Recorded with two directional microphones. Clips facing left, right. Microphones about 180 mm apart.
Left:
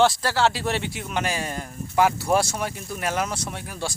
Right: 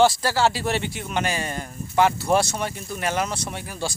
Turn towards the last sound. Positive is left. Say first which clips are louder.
# right 1 dB
turn(degrees=0)  # may be behind; listen again after turning